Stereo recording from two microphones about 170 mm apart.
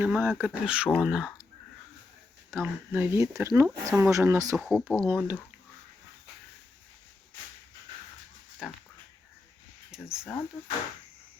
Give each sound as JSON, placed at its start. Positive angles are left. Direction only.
{"t": 0.0, "sound": "speech", "side_deg": -10}
{"t": 2.6, "sound": "speech", "side_deg": -10}
{"t": 4.5, "sound": "speech", "side_deg": 0}
{"t": 5.0, "sound": "speech", "side_deg": -10}
{"t": 8.6, "sound": "speech", "side_deg": -5}
{"t": 9.9, "sound": "speech", "side_deg": -5}